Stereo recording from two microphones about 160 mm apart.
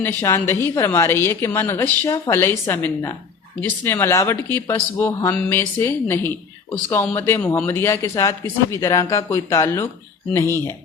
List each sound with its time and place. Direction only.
0.0 s a woman's voice: 15° left (ahead or behind)